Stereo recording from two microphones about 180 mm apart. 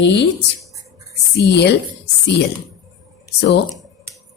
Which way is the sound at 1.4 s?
70° left (ahead or behind).